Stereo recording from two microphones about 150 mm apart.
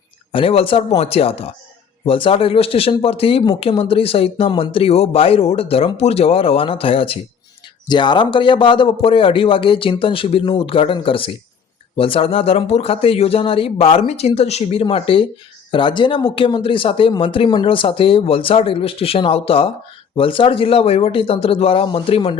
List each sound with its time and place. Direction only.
0.3 s speech: 35° left (ahead or behind)